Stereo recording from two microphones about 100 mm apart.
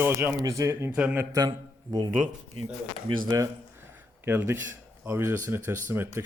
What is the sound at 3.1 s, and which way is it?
Speech, 55° right (ahead or behind).